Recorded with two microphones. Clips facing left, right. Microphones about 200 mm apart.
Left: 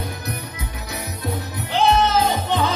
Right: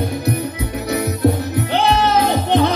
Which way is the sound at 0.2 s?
60° right (ahead or behind).